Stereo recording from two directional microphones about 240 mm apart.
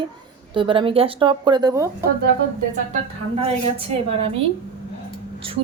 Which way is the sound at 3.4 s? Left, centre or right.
Right.